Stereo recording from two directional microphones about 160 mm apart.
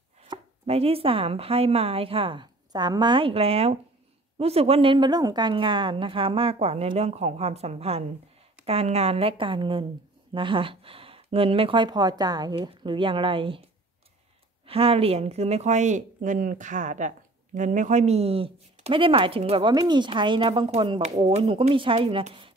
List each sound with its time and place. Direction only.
0.2 s a woman's voice: 40° right (ahead or behind)
14.7 s a woman's voice: 40° right (ahead or behind)